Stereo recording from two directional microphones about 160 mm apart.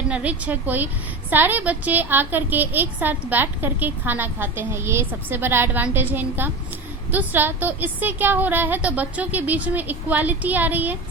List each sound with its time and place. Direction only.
0.1 s a woman's voice: 10° right (ahead or behind)